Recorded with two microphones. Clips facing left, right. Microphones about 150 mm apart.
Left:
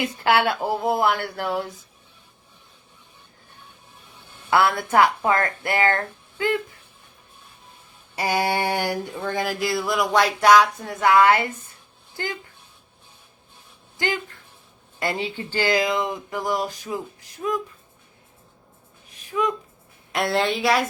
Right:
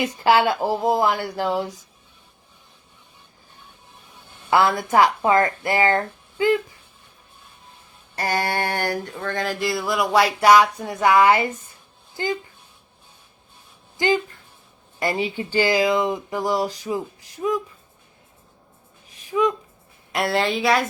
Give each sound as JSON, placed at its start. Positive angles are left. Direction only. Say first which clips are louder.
{"t": 0.0, "sound": "speech", "louder": "right 3 dB", "side_deg": -10}
{"t": 4.9, "sound": "speech", "louder": "right 2 dB", "side_deg": -15}
{"t": 8.1, "sound": "a sound", "louder": "left 1 dB", "side_deg": 10}
{"t": 12.1, "sound": "speech", "louder": "right 5 dB", "side_deg": -15}
{"t": 14.9, "sound": "speech", "louder": "right 3 dB", "side_deg": -10}
{"t": 19.3, "sound": "speech", "louder": "right 4 dB", "side_deg": -10}
{"t": 20.1, "sound": "a sound", "louder": "right 1 dB", "side_deg": 0}